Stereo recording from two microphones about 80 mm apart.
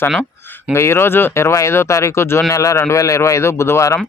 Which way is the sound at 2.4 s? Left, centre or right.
Left.